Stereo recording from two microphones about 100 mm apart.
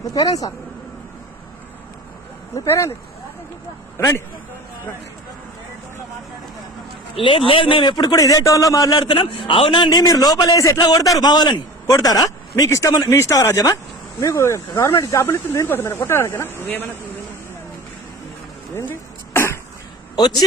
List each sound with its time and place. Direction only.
0.1 s speech: 35° left (ahead or behind)
2.6 s speech: 30° left (ahead or behind)
3.9 s a man's voice: 30° left (ahead or behind)
7.2 s a man's voice: 65° left (ahead or behind)
7.9 s speech: 35° left (ahead or behind)
9.1 s a man's voice: 65° left (ahead or behind)
9.9 s a man's voice: 40° left (ahead or behind); by 17.0 s 20° left (ahead or behind)
19.3 s cough: 25° left (ahead or behind)